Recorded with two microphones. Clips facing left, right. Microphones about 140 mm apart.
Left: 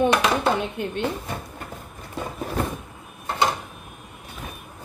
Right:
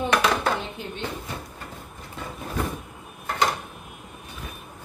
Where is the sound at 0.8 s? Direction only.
60° left (ahead or behind).